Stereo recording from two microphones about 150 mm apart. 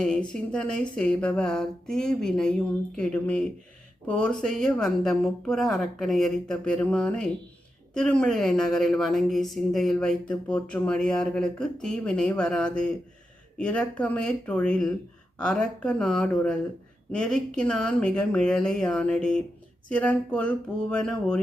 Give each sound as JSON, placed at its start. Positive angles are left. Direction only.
{"t": 0.0, "sound": "speech", "side_deg": 5}